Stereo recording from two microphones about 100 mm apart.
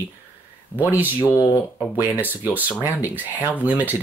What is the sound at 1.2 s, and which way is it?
Speech, 30° left (ahead or behind).